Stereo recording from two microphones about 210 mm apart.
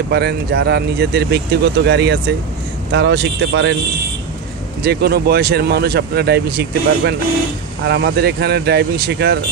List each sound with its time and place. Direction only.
0.1 s speech: 50° right (ahead or behind)
4.8 s speech: 50° right (ahead or behind)